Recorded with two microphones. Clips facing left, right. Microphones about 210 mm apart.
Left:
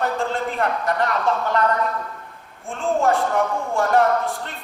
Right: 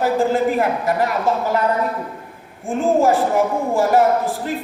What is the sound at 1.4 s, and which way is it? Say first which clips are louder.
Speech: right 2 dB; 5° right (ahead or behind).